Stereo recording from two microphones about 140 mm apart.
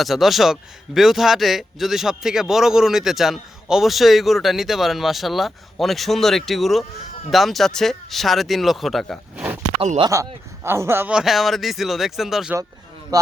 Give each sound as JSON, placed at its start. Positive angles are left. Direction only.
{"t": 0.0, "sound": "a man's voice", "side_deg": 0}
{"t": 10.1, "sound": "speech", "side_deg": -20}
{"t": 11.1, "sound": "a man's voice", "side_deg": -5}